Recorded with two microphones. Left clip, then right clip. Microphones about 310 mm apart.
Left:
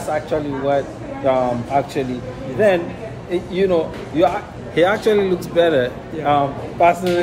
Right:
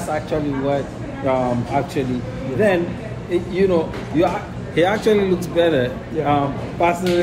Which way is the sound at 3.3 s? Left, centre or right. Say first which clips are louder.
Even; centre.